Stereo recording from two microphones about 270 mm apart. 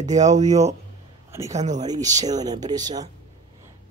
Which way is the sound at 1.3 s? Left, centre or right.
Centre.